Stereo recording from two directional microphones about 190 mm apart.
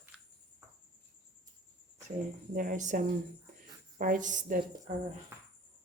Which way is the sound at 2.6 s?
40° right (ahead or behind).